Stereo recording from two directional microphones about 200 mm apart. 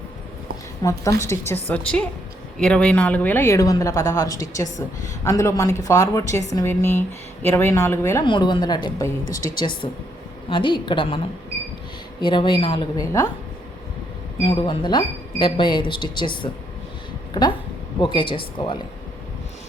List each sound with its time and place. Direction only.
0.8 s a woman's voice: 15° left (ahead or behind)
12.2 s speech: 25° left (ahead or behind)
14.4 s speech: 25° left (ahead or behind)
18.0 s speech: 25° left (ahead or behind)